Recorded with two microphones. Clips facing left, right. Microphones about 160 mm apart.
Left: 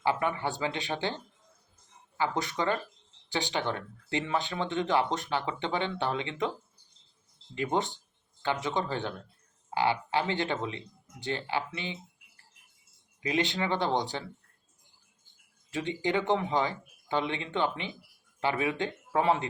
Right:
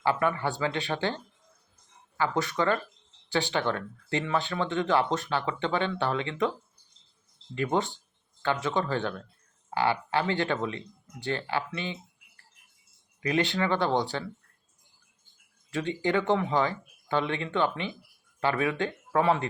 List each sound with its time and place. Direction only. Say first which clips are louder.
0.0 s speech: right 2 dB; 15° left (ahead or behind)
7.5 s speech: right 2 dB; 20° left (ahead or behind)
13.2 s speech: right 3 dB; 20° left (ahead or behind)
15.7 s speech: right 2 dB; 20° left (ahead or behind)